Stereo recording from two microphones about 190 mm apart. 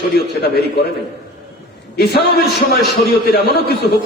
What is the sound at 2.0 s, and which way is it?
A man's voice, 55° left (ahead or behind).